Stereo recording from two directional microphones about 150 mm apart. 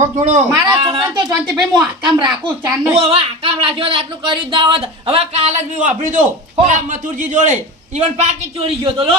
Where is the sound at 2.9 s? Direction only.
40° right (ahead or behind); by 7.5 s 55° right (ahead or behind).